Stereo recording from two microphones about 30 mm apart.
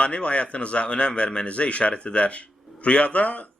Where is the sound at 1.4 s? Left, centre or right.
Left.